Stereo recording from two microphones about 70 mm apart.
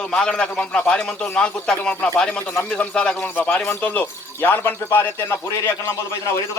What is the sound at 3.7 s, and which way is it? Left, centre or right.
Speech, left.